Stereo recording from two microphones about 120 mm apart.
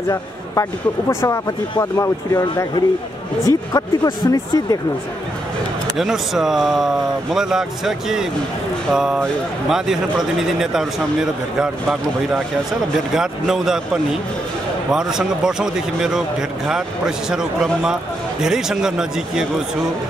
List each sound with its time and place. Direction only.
0.1 s speech: 25° left (ahead or behind)
5.9 s a man's voice: 5° right (ahead or behind)
13.1 s a man's voice: 5° right (ahead or behind)
14.9 s a man's voice: 5° right (ahead or behind)